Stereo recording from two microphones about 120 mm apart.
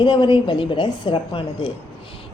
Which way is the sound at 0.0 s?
40° left (ahead or behind).